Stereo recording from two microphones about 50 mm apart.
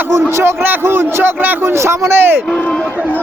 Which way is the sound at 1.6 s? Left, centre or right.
Right.